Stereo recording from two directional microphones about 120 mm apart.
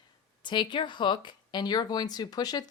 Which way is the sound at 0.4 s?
40° left (ahead or behind).